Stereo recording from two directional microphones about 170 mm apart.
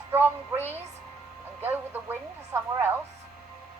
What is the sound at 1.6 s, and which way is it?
Speech, 10° right (ahead or behind).